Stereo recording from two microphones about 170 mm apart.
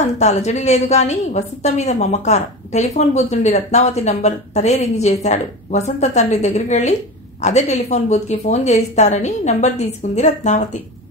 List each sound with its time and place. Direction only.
0.0 s a woman's voice: 40° left (ahead or behind)